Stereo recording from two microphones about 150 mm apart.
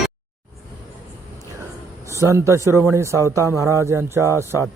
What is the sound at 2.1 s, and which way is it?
Speech, 20° right (ahead or behind).